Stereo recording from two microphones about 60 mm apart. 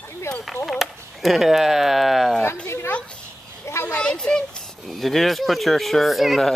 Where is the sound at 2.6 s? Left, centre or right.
Left.